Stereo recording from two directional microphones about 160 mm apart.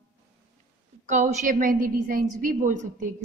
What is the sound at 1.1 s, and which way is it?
A woman's voice, 50° right (ahead or behind).